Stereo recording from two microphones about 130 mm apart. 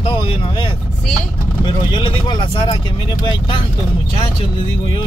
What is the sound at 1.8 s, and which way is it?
Speech, 40° left (ahead or behind).